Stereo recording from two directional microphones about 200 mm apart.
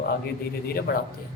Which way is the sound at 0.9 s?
55° left (ahead or behind).